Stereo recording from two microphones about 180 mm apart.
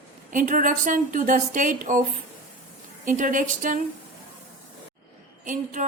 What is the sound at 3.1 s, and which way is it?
Speech, 45° right (ahead or behind).